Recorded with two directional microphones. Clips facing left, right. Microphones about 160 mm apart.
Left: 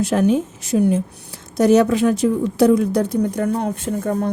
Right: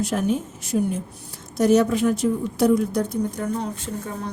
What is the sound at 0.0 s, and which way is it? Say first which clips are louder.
A woman's voice: left 6 dB; 80° left.